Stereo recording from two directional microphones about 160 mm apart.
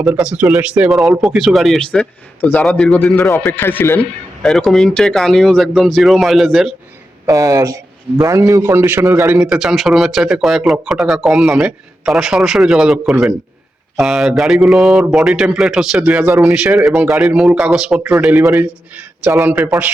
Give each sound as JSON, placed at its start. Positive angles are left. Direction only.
{"t": 0.0, "sound": "speech", "side_deg": -5}
{"t": 4.4, "sound": "speech", "side_deg": 0}
{"t": 7.3, "sound": "a man's voice", "side_deg": -20}
{"t": 9.4, "sound": "a man's voice", "side_deg": -5}